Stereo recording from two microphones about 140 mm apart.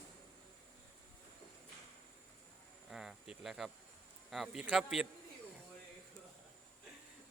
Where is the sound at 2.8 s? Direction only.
5° right (ahead or behind).